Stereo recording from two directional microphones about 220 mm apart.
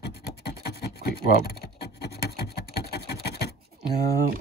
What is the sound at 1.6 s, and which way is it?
Scratch, 45° left (ahead or behind).